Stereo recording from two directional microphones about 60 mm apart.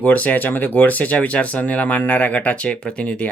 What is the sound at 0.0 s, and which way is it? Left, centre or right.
Speech, left.